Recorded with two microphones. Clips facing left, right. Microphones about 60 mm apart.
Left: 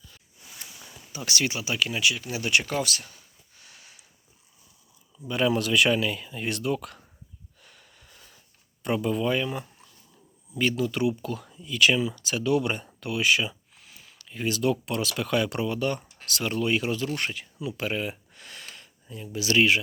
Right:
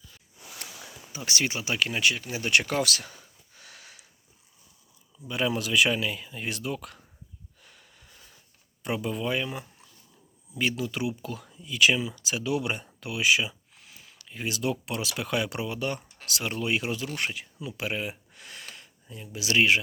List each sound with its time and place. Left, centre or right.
0.5 s a sound: right
1.1 s speech: right
2.5 s speech: right
3.6 s a sound: right
5.3 s speech: centre
7.6 s snort: centre
8.8 s speech: centre
17.7 s a sound: centre
19.0 s speech: centre